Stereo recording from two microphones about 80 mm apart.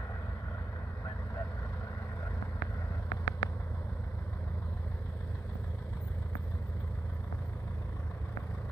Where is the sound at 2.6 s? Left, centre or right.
Left.